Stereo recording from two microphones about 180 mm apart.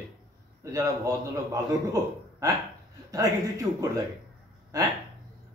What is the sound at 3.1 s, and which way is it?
Speech, 20° right (ahead or behind).